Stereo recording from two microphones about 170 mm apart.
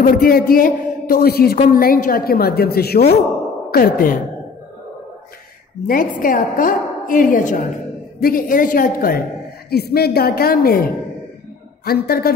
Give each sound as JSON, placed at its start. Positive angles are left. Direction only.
{"t": 0.0, "sound": "a man's voice", "side_deg": 60}
{"t": 3.7, "sound": "a man's voice", "side_deg": 55}
{"t": 5.9, "sound": "a woman's voice", "side_deg": 55}
{"t": 9.7, "sound": "a man's voice", "side_deg": 65}